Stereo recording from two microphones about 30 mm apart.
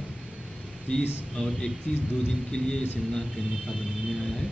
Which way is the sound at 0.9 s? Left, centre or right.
Left.